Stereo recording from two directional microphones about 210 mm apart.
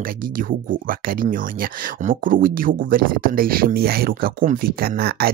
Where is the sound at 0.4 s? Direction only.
40° right (ahead or behind).